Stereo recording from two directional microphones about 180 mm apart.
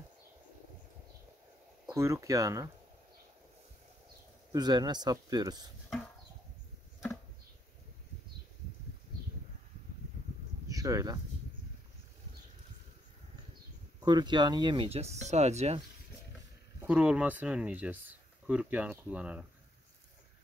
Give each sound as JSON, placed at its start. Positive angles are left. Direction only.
{"t": 1.9, "sound": "speech", "side_deg": -15}
{"t": 4.5, "sound": "speech", "side_deg": -20}
{"t": 10.7, "sound": "a sound", "side_deg": -20}
{"t": 14.0, "sound": "speech", "side_deg": -25}
{"t": 16.8, "sound": "speech", "side_deg": -5}